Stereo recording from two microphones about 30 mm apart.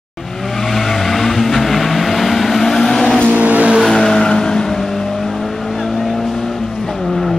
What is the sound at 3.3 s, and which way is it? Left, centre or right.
Vehicle, right.